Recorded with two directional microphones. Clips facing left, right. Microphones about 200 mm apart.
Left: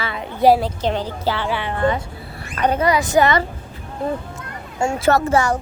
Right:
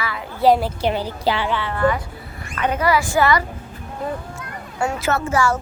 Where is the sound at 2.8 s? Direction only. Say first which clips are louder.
Left 1 dB; 20° left (ahead or behind).